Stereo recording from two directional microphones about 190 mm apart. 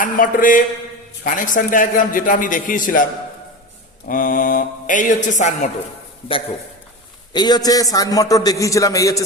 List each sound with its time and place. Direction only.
0.0 s a man's voice: 45° left (ahead or behind)
4.1 s a man's voice: 45° left (ahead or behind)
7.3 s a man's voice: 20° left (ahead or behind)